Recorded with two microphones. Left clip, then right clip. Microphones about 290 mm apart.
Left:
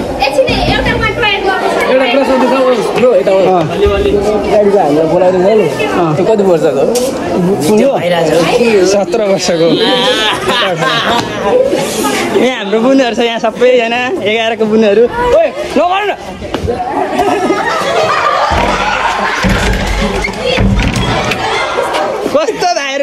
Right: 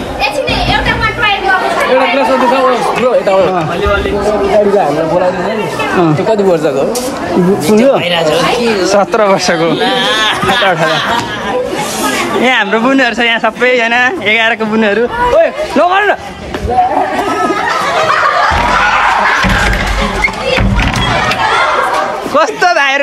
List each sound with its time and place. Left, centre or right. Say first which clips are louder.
6.0 s speech: left 2 dB; right
7.7 s speech: right 1 dB; right
8.6 s speech: left 1 dB; centre
12.4 s speech: right 1 dB; centre
15.7 s a sound: right 1 dB; centre
22.3 s a sound: right 4 dB; centre